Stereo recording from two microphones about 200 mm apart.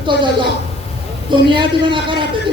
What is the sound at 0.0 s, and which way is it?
Speech, 25° right (ahead or behind).